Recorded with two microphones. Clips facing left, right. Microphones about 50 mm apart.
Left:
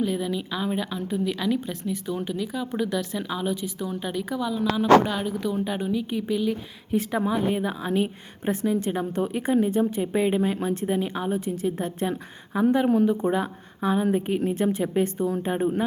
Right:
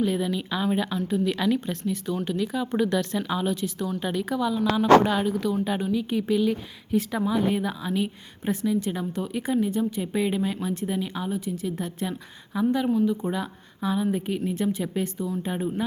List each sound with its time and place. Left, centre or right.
0.0 s speech: centre
6.9 s a woman's voice: centre
12.9 s speech: left
13.2 s a woman's voice: left